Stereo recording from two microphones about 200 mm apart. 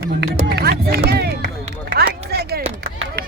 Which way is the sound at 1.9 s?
50° right (ahead or behind).